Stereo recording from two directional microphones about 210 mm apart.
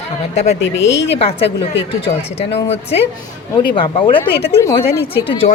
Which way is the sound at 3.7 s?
25° left (ahead or behind).